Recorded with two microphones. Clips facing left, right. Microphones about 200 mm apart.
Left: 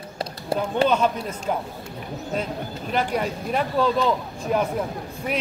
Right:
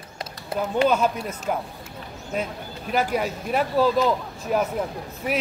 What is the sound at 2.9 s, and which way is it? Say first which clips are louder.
Speech: right 1 dB; 5° right (ahead or behind).